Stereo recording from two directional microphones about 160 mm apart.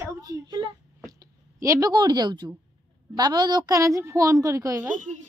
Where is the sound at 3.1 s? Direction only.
25° right (ahead or behind).